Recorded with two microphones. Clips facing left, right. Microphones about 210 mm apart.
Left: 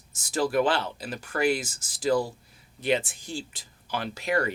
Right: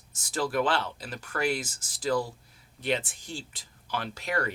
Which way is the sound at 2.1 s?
25° left (ahead or behind).